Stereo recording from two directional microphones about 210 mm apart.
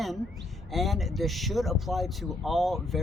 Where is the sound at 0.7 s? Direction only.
Centre (ahead or behind).